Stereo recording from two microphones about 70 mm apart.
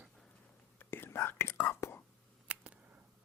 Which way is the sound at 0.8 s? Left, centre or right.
Left.